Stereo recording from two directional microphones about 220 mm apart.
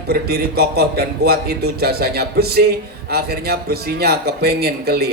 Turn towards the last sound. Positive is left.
turn(degrees=-45)  # may be behind; listen again after turning